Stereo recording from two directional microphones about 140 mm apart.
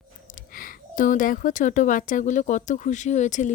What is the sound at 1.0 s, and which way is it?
Speech, 70° left (ahead or behind).